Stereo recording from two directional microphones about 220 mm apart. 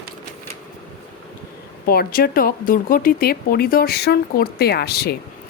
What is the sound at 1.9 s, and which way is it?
Speech, 45° left (ahead or behind).